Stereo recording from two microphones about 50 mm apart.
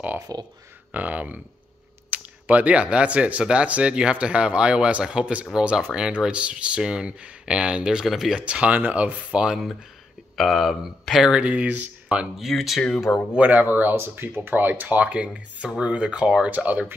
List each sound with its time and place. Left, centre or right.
0.9 s speech: right; by 8.4 s centre
8.4 s speech: right
10.3 s speech: centre
11.2 s speech: right
11.7 s speech: right
12.4 s speech: centre
13.1 s speech: left
13.4 s speech: right
13.9 s speech: right; by 16.4 s centre
16.4 s speech: right